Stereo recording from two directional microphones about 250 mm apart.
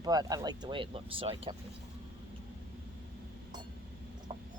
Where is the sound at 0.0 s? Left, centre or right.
Centre.